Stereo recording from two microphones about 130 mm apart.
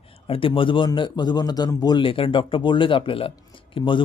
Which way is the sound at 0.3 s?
45° left (ahead or behind).